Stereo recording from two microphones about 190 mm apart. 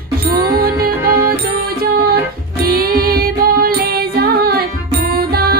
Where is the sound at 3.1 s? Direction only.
55° right (ahead or behind).